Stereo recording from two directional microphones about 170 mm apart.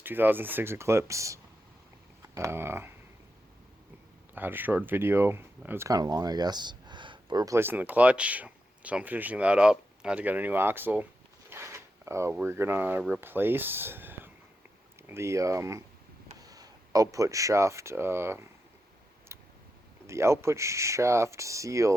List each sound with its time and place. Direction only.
0.0 s speech: 10° right (ahead or behind)
4.4 s speech: 10° right (ahead or behind)
19.3 s tick: 15° right (ahead or behind)
20.1 s speech: 15° right (ahead or behind)